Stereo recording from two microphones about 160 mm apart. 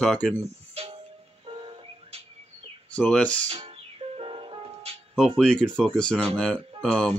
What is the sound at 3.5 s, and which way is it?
Music, 35° right (ahead or behind).